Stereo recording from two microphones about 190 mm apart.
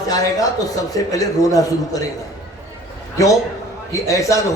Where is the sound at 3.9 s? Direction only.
15° left (ahead or behind).